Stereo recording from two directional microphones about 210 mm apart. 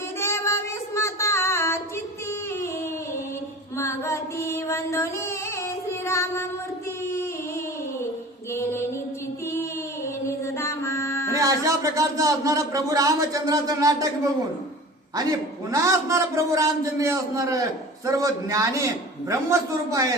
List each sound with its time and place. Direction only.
0.2 s child singing: 15° left (ahead or behind)
3.8 s female singing: 15° left (ahead or behind)
6.1 s child singing: 15° left (ahead or behind)
8.5 s female singing: 10° left (ahead or behind)
10.2 s music: 15° left (ahead or behind)
11.3 s speech: 15° right (ahead or behind)
15.7 s speech: 15° right (ahead or behind)